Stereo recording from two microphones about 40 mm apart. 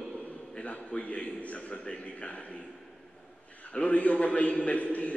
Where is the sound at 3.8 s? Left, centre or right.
Left.